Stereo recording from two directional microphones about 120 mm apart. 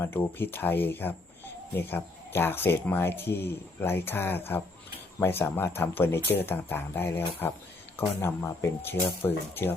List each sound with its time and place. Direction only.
0.0 s speech: 20° left (ahead or behind)